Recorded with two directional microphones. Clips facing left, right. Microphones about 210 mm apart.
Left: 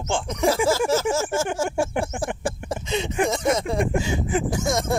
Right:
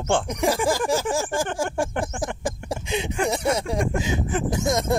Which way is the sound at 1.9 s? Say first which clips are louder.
Left 2 dB; 10° left (ahead or behind).